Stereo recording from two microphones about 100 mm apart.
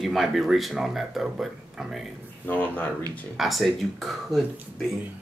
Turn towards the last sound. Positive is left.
turn(degrees=0)  # may be behind; listen again after turning